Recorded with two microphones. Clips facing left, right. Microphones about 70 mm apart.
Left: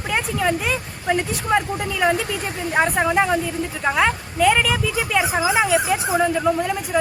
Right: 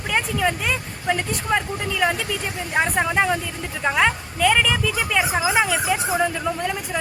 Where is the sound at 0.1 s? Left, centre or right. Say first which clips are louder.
Left 1 dB; centre.